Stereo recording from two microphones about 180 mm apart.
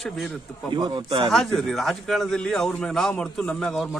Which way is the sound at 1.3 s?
Centre (ahead or behind).